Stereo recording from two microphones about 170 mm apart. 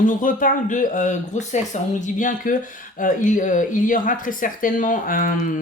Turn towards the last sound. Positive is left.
turn(degrees=50)  # may be behind; listen again after turning